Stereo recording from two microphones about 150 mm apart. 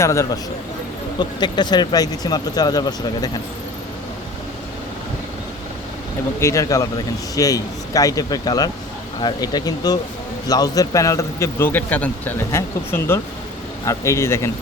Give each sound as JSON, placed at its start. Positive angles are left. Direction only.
{"t": 0.0, "sound": "a man's voice", "side_deg": 20}
{"t": 6.4, "sound": "a man's voice", "side_deg": 20}